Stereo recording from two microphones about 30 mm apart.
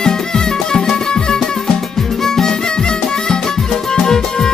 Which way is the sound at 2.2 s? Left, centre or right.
Centre.